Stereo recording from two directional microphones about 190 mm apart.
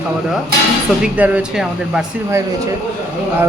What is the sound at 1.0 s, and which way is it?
Speech, 10° right (ahead or behind).